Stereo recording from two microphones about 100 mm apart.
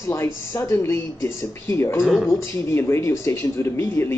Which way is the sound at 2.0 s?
Centre (ahead or behind).